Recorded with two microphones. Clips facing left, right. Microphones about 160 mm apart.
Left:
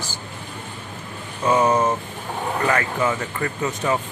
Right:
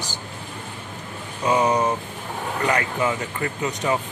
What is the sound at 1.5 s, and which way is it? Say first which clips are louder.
Speech: left 2 dB; 15° right (ahead or behind).